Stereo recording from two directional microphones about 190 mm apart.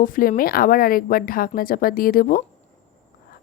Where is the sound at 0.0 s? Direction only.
45° left (ahead or behind).